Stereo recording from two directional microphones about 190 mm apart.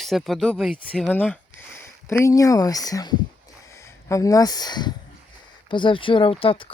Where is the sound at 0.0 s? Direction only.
Centre (ahead or behind).